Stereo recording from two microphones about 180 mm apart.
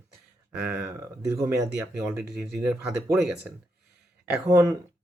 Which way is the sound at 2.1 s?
5° right (ahead or behind).